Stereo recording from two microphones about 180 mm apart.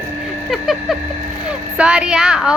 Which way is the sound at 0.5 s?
Centre (ahead or behind).